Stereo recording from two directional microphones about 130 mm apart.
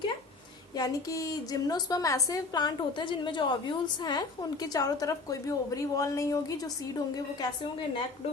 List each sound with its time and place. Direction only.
0.8 s a woman's voice: 25° left (ahead or behind)
7.3 s a woman's voice: 40° left (ahead or behind)